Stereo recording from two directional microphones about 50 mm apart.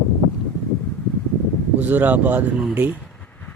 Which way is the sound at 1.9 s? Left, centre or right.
Right.